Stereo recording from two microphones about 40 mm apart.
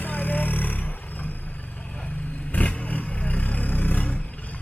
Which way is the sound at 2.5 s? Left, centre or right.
Left.